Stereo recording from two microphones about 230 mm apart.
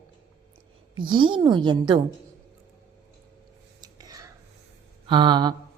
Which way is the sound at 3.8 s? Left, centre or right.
Centre.